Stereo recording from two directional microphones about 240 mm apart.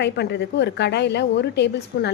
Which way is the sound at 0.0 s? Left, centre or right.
Left.